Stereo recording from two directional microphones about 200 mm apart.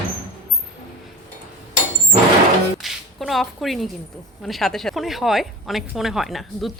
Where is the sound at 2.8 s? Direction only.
Centre (ahead or behind).